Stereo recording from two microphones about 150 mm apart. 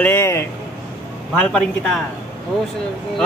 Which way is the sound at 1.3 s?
5° left (ahead or behind).